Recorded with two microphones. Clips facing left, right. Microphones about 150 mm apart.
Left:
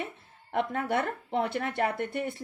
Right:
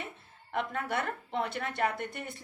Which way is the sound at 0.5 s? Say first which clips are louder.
Left 4 dB; 50° left (ahead or behind).